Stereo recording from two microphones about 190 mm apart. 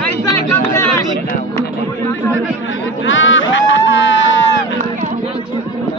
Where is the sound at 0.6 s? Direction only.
15° left (ahead or behind).